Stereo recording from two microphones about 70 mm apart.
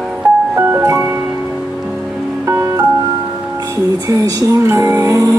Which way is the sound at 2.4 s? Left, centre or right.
Right.